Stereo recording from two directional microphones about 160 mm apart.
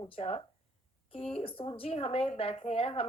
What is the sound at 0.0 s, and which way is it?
A woman's voice, 35° left (ahead or behind).